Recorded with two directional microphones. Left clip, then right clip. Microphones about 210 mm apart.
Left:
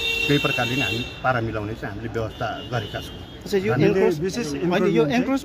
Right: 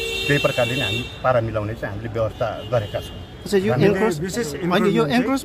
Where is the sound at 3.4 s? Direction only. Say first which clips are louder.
Right 2 dB; 30° right (ahead or behind).